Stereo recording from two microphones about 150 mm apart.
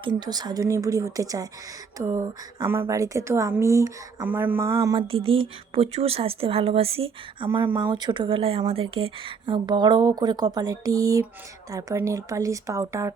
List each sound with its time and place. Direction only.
0.0 s a woman's voice: 25° right (ahead or behind)
4.9 s a woman's voice: 40° right (ahead or behind); by 13.1 s 20° right (ahead or behind)